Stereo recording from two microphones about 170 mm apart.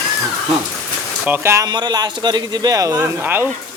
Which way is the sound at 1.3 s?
15° right (ahead or behind).